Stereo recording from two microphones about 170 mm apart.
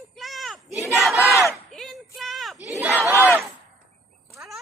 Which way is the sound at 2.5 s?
10° right (ahead or behind).